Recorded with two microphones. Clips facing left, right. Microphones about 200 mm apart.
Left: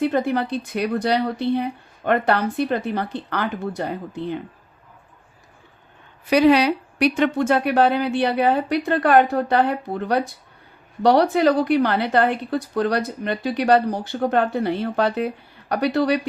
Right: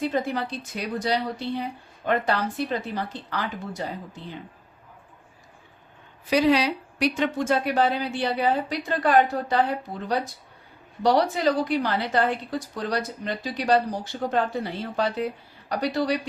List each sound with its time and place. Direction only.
0.0 s a woman's voice: 60° left (ahead or behind)
6.2 s a woman's voice: 65° left (ahead or behind)